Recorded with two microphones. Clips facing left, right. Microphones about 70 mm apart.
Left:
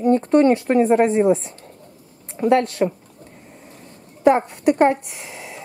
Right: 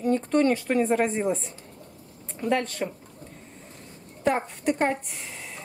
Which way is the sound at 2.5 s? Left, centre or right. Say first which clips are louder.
Left 9 dB; centre.